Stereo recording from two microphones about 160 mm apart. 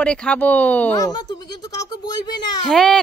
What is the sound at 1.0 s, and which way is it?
Speech, 25° left (ahead or behind).